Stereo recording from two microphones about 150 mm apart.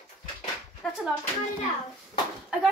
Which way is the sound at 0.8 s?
5° left (ahead or behind).